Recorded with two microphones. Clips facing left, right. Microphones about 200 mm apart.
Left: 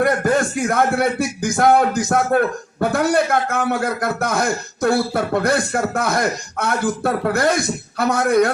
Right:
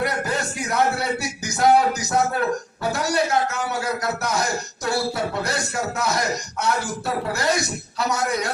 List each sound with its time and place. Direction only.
0.0 s a man's voice: 50° left (ahead or behind)